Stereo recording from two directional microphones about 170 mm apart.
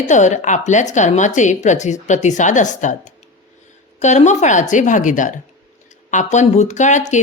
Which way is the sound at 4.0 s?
45° left (ahead or behind).